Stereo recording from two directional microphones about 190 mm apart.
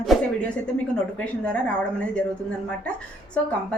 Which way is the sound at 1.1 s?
5° left (ahead or behind).